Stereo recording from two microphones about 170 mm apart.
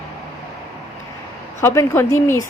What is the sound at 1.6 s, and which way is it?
Speech, 15° left (ahead or behind).